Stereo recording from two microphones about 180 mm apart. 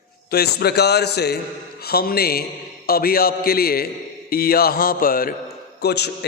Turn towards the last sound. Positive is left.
turn(degrees=65)  # may be behind; listen again after turning